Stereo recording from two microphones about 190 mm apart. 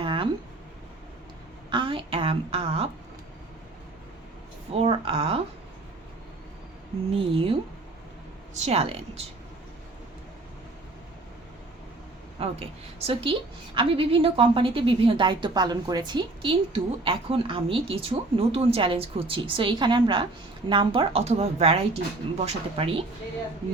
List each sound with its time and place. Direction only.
0.0 s a sound: 25° right (ahead or behind)
1.7 s a woman's voice: 25° right (ahead or behind)
4.7 s speech: 30° right (ahead or behind)
7.1 s a woman's voice: 30° right (ahead or behind)
8.5 s speech: 35° right (ahead or behind)
12.4 s a woman's voice: 30° right (ahead or behind)